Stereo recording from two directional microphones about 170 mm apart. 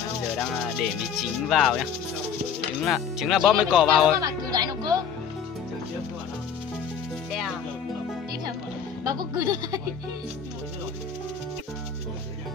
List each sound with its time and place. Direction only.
0.4 s music: centre (ahead or behind)
1.5 s speech: centre (ahead or behind)
4.2 s music: 25° right (ahead or behind)
9.0 s speech: 25° right (ahead or behind)